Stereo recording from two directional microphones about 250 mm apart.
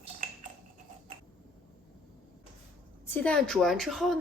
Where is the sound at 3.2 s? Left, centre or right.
Centre.